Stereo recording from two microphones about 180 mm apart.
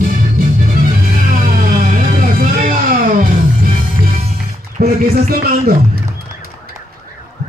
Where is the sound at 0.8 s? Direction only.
50° right (ahead or behind).